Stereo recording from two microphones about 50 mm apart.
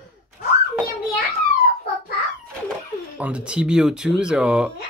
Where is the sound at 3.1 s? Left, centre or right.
Right.